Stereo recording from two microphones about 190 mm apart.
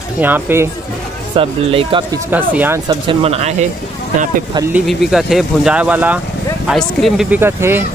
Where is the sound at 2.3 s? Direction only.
10° right (ahead or behind).